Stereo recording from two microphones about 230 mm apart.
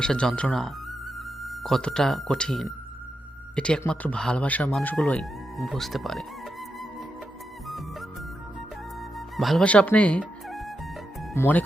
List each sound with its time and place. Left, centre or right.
0.0 s speech: centre
9.1 s music: centre
11.3 s speech: centre